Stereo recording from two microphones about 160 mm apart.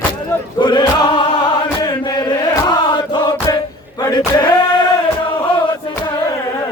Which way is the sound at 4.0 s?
25° left (ahead or behind).